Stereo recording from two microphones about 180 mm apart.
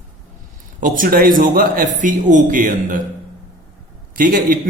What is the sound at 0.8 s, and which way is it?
A man's voice, 50° right (ahead or behind).